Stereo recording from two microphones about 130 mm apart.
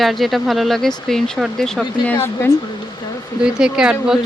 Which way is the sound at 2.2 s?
20° left (ahead or behind).